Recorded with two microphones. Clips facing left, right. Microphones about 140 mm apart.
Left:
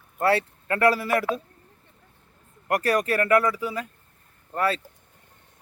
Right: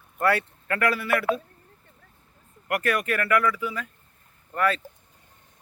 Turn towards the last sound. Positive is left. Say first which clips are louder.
# even
turn(degrees=30)  # may be behind; listen again after turning